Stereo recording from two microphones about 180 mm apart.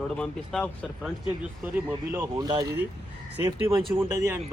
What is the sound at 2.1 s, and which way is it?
Speech, 20° right (ahead or behind).